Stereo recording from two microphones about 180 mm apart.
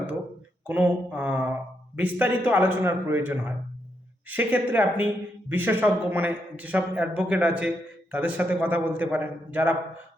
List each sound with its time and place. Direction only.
0.7 s speech: 10° right (ahead or behind)